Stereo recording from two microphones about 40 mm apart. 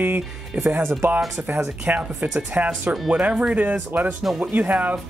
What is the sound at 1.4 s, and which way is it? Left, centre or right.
Speech, right.